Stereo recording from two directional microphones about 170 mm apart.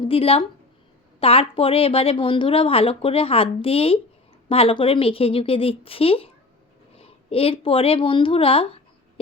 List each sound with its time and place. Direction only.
0.0 s a woman's voice: 35° left (ahead or behind)